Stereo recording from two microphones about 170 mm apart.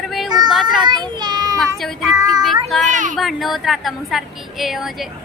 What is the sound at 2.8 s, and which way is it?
Speech, 50° right (ahead or behind).